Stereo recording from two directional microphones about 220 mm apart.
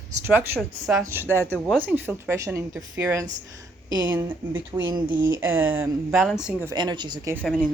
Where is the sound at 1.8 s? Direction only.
10° right (ahead or behind).